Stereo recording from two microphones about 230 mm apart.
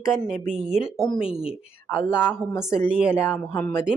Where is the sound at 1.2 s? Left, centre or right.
Left.